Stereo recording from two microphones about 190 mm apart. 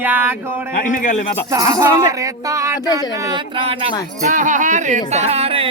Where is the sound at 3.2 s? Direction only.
25° right (ahead or behind).